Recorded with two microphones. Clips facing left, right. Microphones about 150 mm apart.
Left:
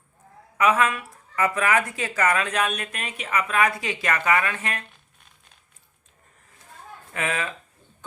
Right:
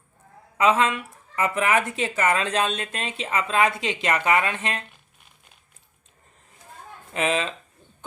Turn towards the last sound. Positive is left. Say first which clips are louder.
# right 4 dB
turn(degrees=-20)  # may be behind; listen again after turning